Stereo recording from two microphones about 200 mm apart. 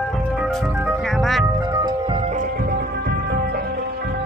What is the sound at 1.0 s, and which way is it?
Music, centre (ahead or behind).